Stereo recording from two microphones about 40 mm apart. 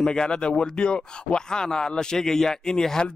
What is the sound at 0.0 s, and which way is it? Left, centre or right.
A man's voice, centre.